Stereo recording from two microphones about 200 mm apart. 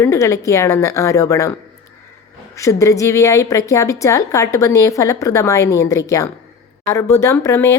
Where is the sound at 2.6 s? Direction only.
15° left (ahead or behind).